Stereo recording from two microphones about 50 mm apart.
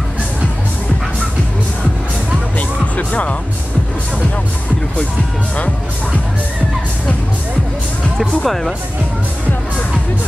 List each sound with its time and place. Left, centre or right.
3.0 s music: left
8.2 s speech: centre